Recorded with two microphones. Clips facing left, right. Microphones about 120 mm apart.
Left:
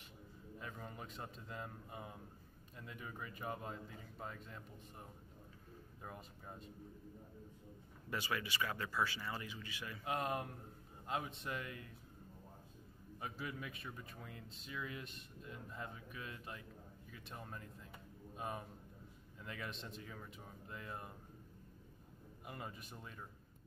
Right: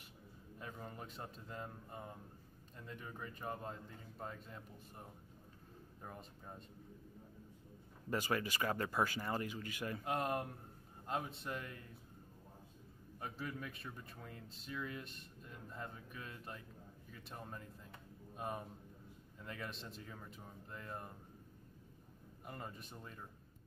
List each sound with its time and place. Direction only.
0.6 s a man's voice: centre (ahead or behind)
6.0 s a man's voice: centre (ahead or behind)
8.1 s speech: 40° right (ahead or behind)
10.0 s a man's voice: centre (ahead or behind)
13.2 s a man's voice: 5° left (ahead or behind)
18.3 s a sound: centre (ahead or behind)
19.4 s a man's voice: centre (ahead or behind)
22.5 s a man's voice: 5° left (ahead or behind)